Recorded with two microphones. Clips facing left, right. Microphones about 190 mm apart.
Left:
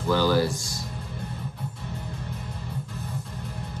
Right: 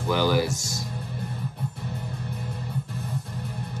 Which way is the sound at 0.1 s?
15° right (ahead or behind).